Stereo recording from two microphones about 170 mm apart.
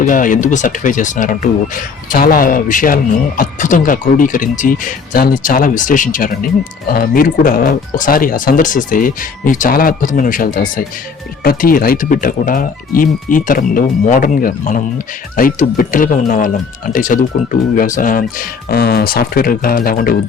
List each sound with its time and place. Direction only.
0.0 s speech: 50° left (ahead or behind)